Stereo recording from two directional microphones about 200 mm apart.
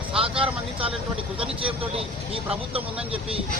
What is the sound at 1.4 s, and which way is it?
A man's voice, 25° right (ahead or behind).